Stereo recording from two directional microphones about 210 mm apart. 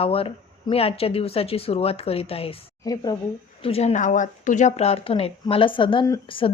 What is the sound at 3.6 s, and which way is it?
Speech, 30° left (ahead or behind).